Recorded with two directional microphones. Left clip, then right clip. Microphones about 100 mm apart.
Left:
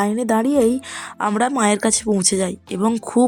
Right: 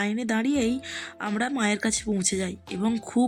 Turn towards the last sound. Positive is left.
turn(degrees=15)  # may be behind; listen again after turning